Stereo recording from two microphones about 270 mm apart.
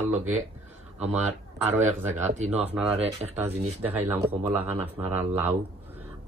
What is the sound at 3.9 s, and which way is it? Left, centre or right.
Speech, centre.